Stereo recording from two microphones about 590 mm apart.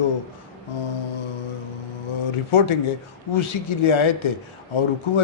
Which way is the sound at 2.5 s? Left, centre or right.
Left.